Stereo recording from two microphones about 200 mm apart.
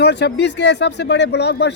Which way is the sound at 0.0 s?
55° left (ahead or behind).